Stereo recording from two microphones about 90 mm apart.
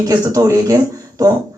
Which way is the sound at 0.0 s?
40° right (ahead or behind).